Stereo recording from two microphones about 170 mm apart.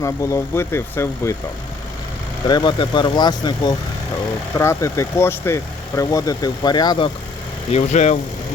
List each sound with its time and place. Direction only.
0.0 s speech: 20° left (ahead or behind)
2.5 s speech: 25° left (ahead or behind)
7.7 s speech: 40° left (ahead or behind)